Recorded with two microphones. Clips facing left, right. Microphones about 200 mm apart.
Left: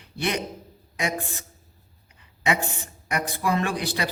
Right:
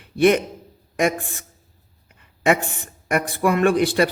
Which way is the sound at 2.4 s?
50° right (ahead or behind).